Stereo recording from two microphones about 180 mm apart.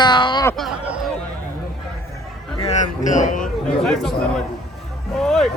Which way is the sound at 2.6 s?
40° left (ahead or behind).